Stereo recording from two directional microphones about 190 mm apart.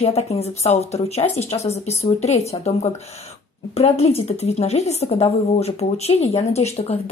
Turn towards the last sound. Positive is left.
turn(degrees=35)  # may be behind; listen again after turning